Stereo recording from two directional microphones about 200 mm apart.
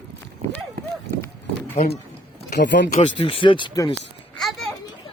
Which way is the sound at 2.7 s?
60° left (ahead or behind).